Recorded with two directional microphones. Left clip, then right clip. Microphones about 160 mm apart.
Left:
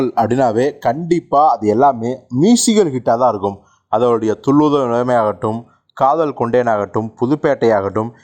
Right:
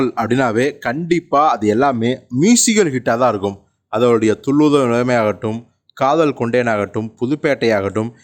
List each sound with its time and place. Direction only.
0.0 s speech: 5° left (ahead or behind); by 3.6 s 15° right (ahead or behind)
3.9 s speech: centre (ahead or behind)
5.0 s speech: 35° right (ahead or behind)
5.5 s speech: 5° right (ahead or behind)
6.4 s speech: 35° right (ahead or behind)